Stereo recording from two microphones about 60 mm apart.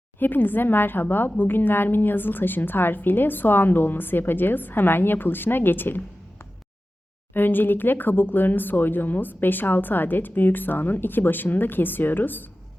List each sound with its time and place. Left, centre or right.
0.2 s speech: left
7.3 s speech: left